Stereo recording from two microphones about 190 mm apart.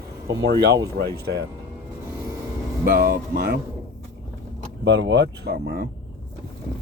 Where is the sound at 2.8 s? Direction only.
50° right (ahead or behind).